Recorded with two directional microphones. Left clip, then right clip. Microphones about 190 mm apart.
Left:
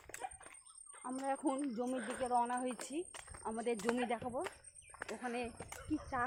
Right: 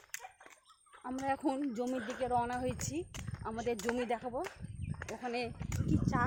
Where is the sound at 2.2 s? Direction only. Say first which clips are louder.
Right 1 dB; 65° right (ahead or behind).